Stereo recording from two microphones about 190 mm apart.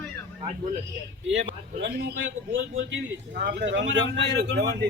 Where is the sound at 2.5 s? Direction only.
75° right (ahead or behind).